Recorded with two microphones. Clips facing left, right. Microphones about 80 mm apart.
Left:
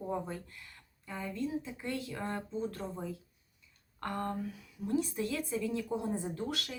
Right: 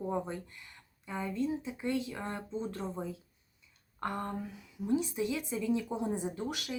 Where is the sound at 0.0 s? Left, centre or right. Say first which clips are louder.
Right 2 dB; centre.